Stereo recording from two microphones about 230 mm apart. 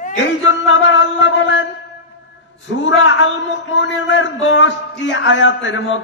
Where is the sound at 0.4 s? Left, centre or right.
Left.